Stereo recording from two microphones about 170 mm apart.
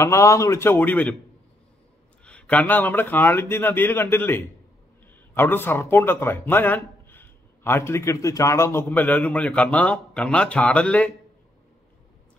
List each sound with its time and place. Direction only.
0.0 s speech: 15° left (ahead or behind)
2.2 s speech: 10° left (ahead or behind)